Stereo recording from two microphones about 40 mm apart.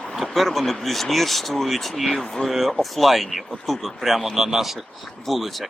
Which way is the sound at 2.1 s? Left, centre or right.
Centre.